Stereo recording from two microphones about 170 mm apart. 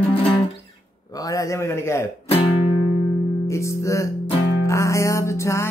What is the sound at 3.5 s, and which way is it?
Music, 15° left (ahead or behind).